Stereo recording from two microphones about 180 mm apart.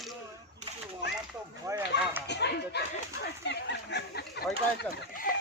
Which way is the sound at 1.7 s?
20° right (ahead or behind).